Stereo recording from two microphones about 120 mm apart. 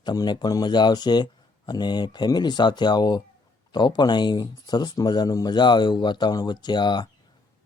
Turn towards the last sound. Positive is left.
turn(degrees=40)  # may be behind; listen again after turning